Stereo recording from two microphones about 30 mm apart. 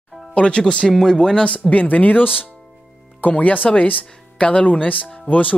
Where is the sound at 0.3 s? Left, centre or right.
Left.